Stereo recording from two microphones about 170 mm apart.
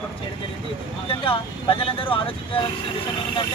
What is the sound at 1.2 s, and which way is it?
Speech, 30° left (ahead or behind).